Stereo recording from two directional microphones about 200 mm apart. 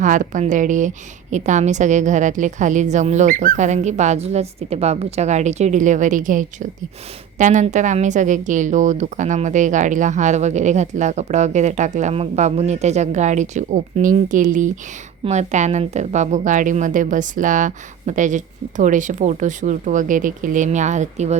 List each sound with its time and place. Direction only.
0.0 s a woman's voice: 40° right (ahead or behind)